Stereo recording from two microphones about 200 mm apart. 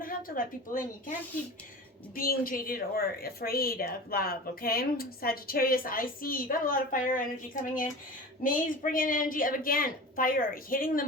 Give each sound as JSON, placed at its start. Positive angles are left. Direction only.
{"t": 0.0, "sound": "a woman's voice", "side_deg": 45}
{"t": 2.1, "sound": "a woman's voice", "side_deg": 45}